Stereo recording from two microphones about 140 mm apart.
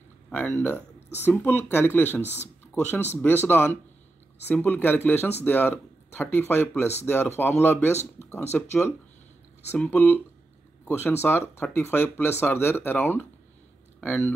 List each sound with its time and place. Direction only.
0.6 s speech: 15° left (ahead or behind)